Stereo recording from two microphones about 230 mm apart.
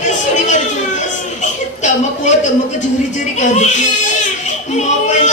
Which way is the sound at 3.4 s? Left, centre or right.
Left.